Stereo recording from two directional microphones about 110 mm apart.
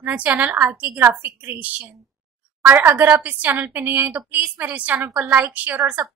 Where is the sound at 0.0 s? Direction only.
15° right (ahead or behind).